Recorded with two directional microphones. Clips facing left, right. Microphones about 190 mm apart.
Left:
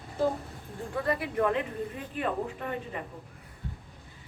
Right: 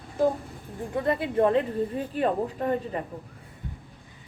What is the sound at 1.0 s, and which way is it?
A woman's voice, 25° right (ahead or behind).